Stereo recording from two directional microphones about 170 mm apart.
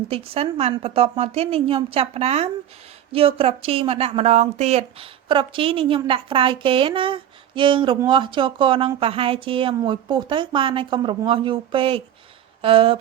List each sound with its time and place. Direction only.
0.1 s a woman's voice: 35° right (ahead or behind)